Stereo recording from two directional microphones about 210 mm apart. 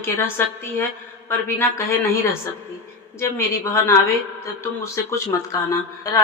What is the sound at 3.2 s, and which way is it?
Speech, 15° left (ahead or behind).